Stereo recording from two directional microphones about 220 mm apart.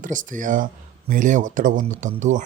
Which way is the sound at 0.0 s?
35° right (ahead or behind).